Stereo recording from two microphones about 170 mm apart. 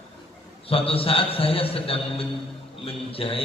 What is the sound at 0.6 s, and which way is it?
A man's voice, 35° left (ahead or behind).